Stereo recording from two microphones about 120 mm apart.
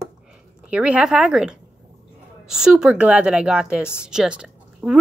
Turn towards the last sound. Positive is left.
turn(degrees=-5)  # may be behind; listen again after turning